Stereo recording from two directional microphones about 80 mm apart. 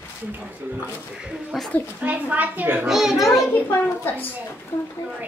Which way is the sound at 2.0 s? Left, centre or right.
Right.